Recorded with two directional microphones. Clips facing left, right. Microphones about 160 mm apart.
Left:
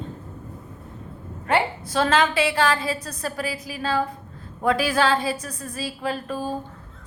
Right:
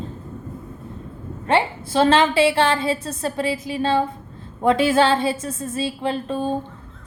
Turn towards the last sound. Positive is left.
turn(degrees=-25)  # may be behind; listen again after turning